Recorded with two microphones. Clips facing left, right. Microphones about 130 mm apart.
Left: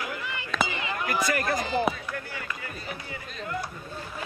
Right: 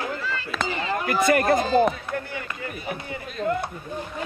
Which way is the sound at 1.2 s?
55° right (ahead or behind).